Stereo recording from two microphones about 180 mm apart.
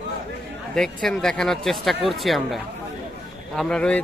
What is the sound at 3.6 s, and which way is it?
Speech, 5° left (ahead or behind).